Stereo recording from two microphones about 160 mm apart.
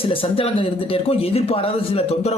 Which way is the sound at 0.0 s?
35° left (ahead or behind).